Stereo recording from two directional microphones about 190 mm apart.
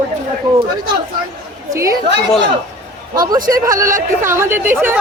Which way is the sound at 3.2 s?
20° right (ahead or behind).